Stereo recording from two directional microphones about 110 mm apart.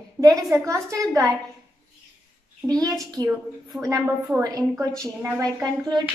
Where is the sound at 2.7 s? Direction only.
35° right (ahead or behind).